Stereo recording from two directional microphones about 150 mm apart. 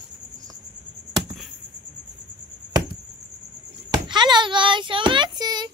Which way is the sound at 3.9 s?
30° right (ahead or behind).